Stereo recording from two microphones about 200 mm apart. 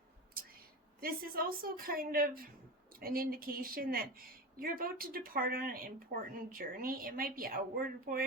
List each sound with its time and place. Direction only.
0.9 s speech: 50° right (ahead or behind)